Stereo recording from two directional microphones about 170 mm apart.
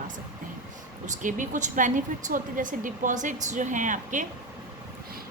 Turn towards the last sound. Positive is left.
turn(degrees=-50)  # may be behind; listen again after turning